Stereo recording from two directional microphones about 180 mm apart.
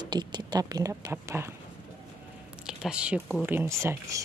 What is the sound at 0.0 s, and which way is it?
A woman's voice, 25° right (ahead or behind).